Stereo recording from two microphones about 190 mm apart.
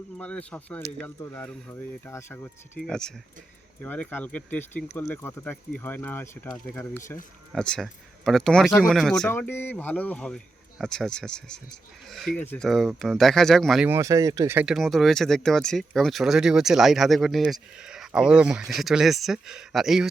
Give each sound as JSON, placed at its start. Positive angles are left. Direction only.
{"t": 0.2, "sound": "speech", "side_deg": 5}